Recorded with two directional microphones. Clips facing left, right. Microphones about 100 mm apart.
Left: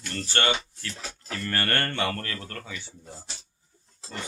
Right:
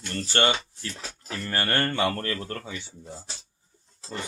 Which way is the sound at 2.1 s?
30° right (ahead or behind).